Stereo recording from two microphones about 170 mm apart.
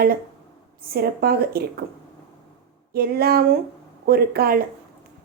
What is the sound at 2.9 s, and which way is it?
A woman's voice, 65° right (ahead or behind).